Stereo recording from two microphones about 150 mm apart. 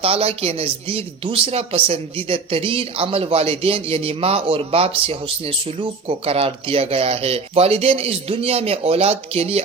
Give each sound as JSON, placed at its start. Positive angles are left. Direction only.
{"t": 0.0, "sound": "speech", "side_deg": -40}